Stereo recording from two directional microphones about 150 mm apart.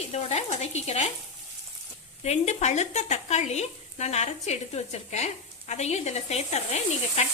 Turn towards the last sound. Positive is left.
turn(degrees=45)  # may be behind; listen again after turning